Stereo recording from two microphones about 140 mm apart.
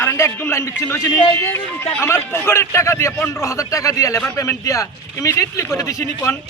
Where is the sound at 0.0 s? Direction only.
15° left (ahead or behind).